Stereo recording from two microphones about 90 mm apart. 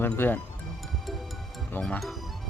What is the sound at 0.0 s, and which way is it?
Speech, 25° left (ahead or behind).